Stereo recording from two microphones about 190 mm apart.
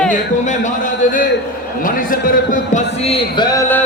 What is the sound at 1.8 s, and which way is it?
A man's voice, 45° left (ahead or behind).